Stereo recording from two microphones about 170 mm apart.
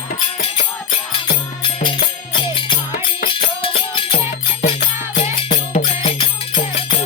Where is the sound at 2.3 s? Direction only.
30° left (ahead or behind).